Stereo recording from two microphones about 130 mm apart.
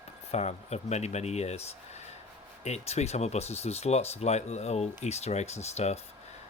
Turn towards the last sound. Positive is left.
turn(degrees=60)  # may be behind; listen again after turning